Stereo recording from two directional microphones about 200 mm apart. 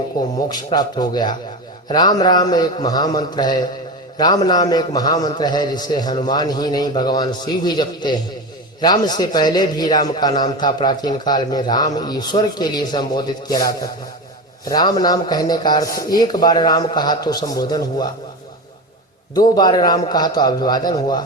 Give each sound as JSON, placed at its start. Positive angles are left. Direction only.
{"t": 0.3, "sound": "a man's voice", "side_deg": 20}
{"t": 19.5, "sound": "a man's voice", "side_deg": 20}